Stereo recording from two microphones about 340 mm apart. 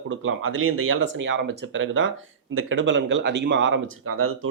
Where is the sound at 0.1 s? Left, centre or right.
Right.